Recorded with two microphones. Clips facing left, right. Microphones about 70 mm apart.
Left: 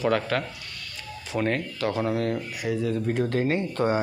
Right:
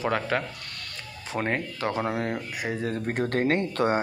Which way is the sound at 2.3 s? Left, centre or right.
Right.